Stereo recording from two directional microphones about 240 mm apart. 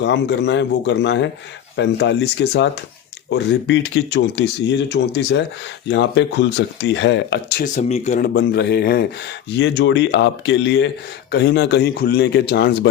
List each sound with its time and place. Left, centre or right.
0.0 s speech: left
7.6 s speech: left
8.3 s speech: left